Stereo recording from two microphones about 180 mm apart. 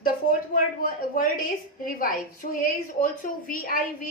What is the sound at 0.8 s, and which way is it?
A woman's voice, 50° left (ahead or behind).